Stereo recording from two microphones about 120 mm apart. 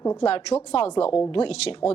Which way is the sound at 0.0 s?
25° left (ahead or behind).